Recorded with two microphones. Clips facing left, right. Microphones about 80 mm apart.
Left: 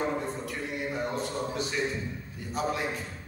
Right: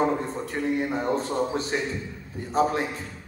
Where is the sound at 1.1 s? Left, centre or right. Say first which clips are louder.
Right 6 dB; right.